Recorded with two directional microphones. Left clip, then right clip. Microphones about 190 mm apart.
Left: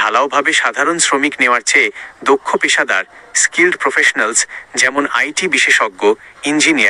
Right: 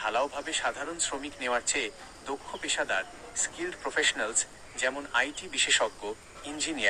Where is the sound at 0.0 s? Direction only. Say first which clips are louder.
Left 17 dB; 50° left (ahead or behind).